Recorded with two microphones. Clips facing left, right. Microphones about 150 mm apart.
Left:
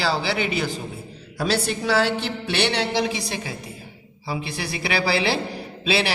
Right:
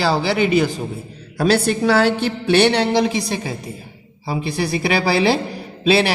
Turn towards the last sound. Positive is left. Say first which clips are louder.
# right 7 dB
turn(degrees=-45)  # may be behind; listen again after turning